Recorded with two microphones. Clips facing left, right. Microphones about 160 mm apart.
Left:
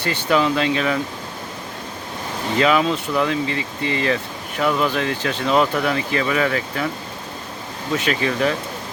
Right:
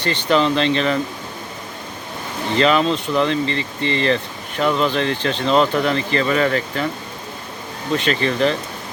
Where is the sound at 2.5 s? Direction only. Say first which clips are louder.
Right 1 dB; 5° left (ahead or behind).